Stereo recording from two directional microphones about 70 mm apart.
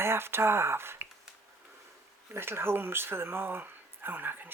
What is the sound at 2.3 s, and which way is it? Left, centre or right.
Speech, right.